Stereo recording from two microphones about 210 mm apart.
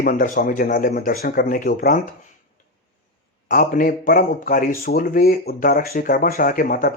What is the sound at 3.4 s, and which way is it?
Speech, 40° left (ahead or behind).